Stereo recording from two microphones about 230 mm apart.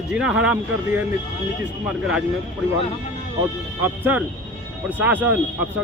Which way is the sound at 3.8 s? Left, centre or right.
Centre.